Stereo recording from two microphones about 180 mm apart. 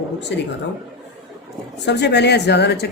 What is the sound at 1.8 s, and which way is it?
Speech, 70° left (ahead or behind).